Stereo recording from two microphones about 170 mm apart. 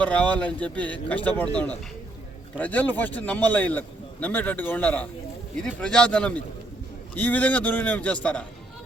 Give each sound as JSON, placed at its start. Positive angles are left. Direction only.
{"t": 0.0, "sound": "speech", "side_deg": 5}